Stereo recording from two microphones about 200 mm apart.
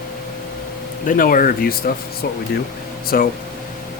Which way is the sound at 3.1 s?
45° left (ahead or behind).